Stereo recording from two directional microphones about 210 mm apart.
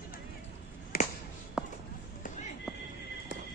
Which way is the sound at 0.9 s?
45° left (ahead or behind).